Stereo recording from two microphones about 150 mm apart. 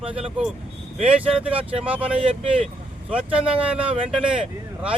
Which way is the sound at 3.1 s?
10° right (ahead or behind).